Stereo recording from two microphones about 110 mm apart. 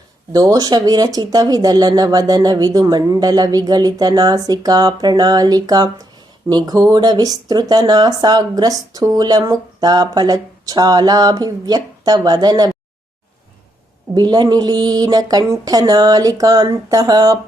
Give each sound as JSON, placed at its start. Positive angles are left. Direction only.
{"t": 0.3, "sound": "speech", "side_deg": -35}
{"t": 14.1, "sound": "speech", "side_deg": -40}